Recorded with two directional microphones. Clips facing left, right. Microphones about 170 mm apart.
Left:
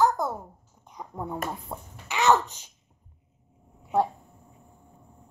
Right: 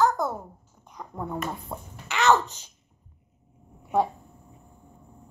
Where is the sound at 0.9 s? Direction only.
10° left (ahead or behind).